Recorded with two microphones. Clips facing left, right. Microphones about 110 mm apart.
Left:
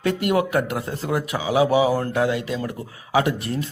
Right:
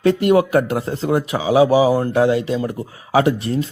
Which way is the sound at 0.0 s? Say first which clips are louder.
Right 6 dB; 30° right (ahead or behind).